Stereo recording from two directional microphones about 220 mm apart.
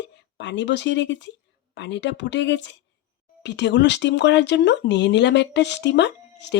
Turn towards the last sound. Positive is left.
turn(degrees=50)  # may be behind; listen again after turning